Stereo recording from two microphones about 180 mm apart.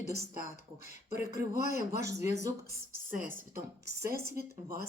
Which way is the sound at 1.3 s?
15° right (ahead or behind).